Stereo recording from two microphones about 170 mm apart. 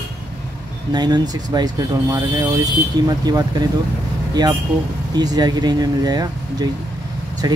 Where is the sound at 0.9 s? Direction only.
25° right (ahead or behind).